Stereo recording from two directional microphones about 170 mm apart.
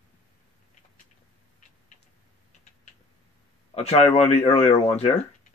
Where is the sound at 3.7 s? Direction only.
40° left (ahead or behind).